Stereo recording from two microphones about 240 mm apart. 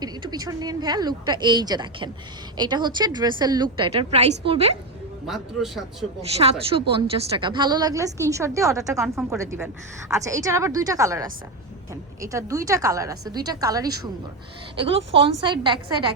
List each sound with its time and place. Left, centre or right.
0.0 s a woman's voice: centre
5.2 s a man's voice: centre
6.3 s a woman's voice: right
8.9 s a man's voice: centre
9.4 s a woman's voice: centre